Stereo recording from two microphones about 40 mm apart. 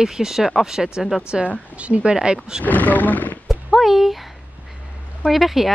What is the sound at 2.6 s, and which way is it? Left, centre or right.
Speech, left.